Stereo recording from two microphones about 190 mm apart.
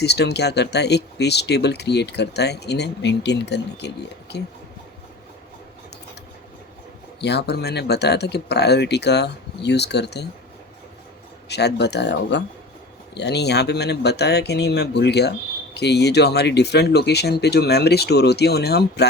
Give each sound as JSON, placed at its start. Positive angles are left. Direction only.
{"t": 0.0, "sound": "speech", "side_deg": 60}
{"t": 7.2, "sound": "speech", "side_deg": 60}
{"t": 11.4, "sound": "speech", "side_deg": 60}